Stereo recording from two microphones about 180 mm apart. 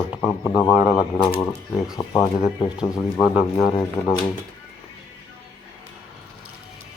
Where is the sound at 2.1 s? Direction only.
5° right (ahead or behind).